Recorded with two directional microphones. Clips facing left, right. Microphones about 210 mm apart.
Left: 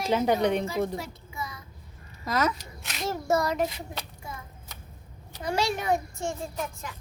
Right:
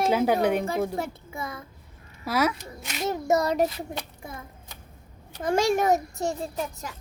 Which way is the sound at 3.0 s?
20° right (ahead or behind).